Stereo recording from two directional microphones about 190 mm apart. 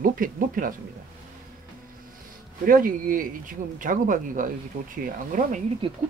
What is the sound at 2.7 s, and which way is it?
Speech, 50° right (ahead or behind).